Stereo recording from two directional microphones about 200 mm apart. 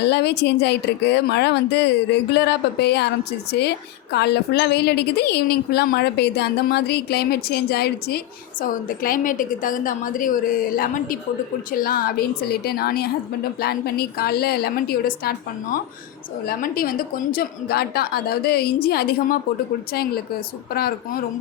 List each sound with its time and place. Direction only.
0.0 s a woman's voice: 55° left (ahead or behind)